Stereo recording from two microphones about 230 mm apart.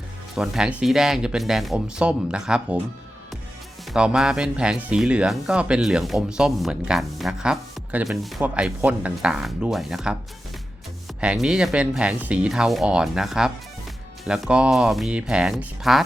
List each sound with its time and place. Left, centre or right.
0.3 s speech: centre
3.9 s speech: centre
11.2 s speech: centre